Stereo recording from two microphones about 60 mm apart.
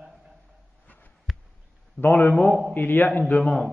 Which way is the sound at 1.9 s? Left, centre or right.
Left.